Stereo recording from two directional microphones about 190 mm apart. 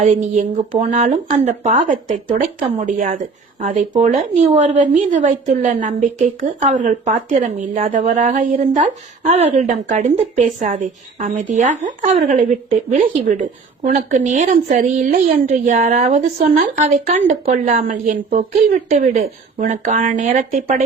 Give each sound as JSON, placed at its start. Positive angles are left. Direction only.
{"t": 0.0, "sound": "a woman's voice", "side_deg": -40}